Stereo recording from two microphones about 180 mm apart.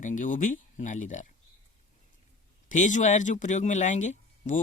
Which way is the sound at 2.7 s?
45° left (ahead or behind).